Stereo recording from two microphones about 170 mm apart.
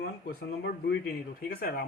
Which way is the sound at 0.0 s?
75° left (ahead or behind).